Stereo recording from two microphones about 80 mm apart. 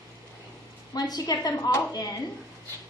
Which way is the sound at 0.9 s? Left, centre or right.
Left.